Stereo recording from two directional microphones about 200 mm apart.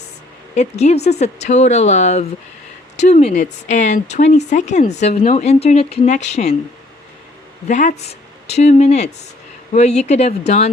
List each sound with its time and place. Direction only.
0.5 s speech: 35° left (ahead or behind)
7.7 s speech: 35° left (ahead or behind)